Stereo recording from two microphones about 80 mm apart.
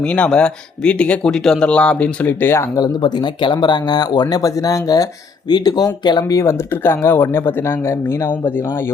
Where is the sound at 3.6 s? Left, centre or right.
Left.